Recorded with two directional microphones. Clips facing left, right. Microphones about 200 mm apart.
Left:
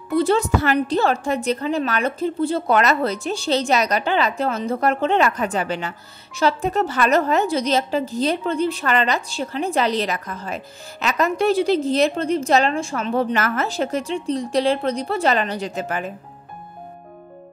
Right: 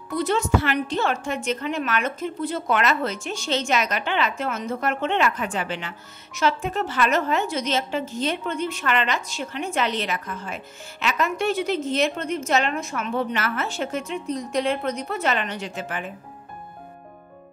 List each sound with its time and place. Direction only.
0.1 s a woman's voice: 30° left (ahead or behind)